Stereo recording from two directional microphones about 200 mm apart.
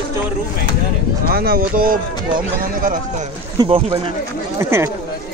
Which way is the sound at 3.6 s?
25° right (ahead or behind).